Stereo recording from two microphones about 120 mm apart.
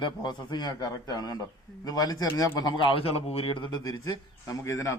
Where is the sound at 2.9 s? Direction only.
55° left (ahead or behind).